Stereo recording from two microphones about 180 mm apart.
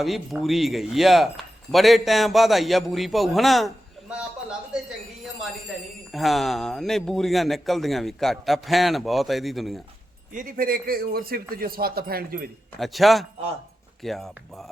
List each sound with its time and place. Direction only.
0.0 s speech: centre (ahead or behind)
6.1 s speech: centre (ahead or behind)
10.3 s a man's voice: 50° right (ahead or behind)
12.8 s speech: centre (ahead or behind)